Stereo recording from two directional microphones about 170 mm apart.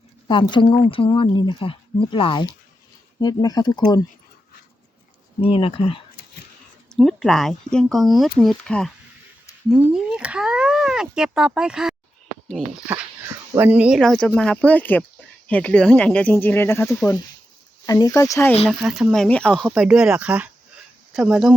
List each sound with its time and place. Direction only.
0.3 s speech: 30° left (ahead or behind)
5.4 s speech: 30° left (ahead or behind)
6.9 s speech: centre (ahead or behind)
13.6 s speech: 10° right (ahead or behind); by 18.5 s 15° left (ahead or behind)
18.9 s speech: centre (ahead or behind)
19.6 s speech: 5° right (ahead or behind)